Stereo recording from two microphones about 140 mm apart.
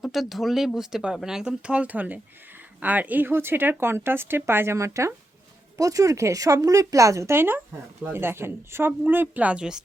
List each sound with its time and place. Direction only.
0.0 s a woman's voice: centre (ahead or behind)